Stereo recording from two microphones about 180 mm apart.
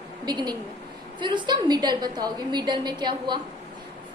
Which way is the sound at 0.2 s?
25° right (ahead or behind).